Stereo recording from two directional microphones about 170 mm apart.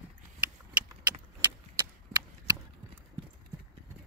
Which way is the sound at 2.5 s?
25° right (ahead or behind).